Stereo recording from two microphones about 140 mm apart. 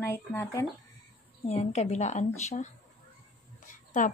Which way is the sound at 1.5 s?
50° left (ahead or behind).